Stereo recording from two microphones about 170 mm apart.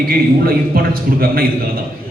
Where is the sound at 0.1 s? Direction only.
60° right (ahead or behind).